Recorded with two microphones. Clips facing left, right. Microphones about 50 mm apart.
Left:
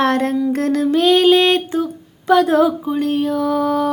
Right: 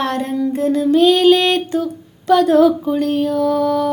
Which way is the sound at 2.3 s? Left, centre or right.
Left.